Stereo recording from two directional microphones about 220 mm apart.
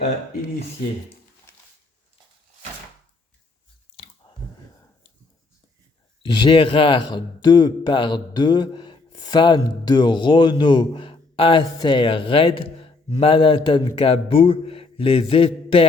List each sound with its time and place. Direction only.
6.2 s a man's voice: 20° left (ahead or behind)